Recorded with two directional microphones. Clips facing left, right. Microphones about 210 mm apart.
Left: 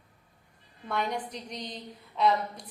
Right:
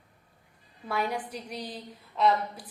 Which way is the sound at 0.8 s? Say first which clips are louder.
Right 1 dB; 5° right (ahead or behind).